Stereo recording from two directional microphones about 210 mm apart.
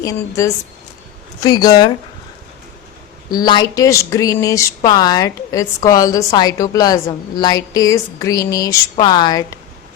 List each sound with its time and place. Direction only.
0.0 s speech: 15° left (ahead or behind)
3.2 s speech: 20° left (ahead or behind)